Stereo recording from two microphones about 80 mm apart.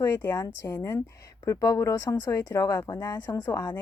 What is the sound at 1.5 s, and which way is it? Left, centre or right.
Speech, left.